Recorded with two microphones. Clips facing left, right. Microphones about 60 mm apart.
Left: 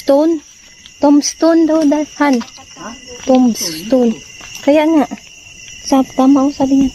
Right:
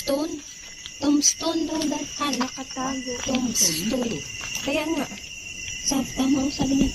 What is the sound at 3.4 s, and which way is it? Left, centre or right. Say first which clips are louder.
Speech: left 12 dB; left.